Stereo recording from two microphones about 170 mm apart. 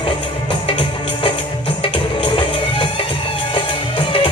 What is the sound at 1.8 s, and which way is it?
Music, 30° left (ahead or behind).